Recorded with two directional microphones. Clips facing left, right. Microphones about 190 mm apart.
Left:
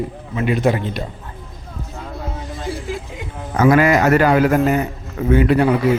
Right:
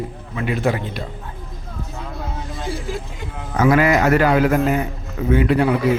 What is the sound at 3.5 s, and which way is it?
Speech, 45° left (ahead or behind).